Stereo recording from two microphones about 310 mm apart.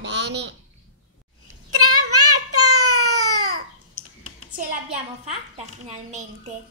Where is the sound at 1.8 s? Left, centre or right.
Right.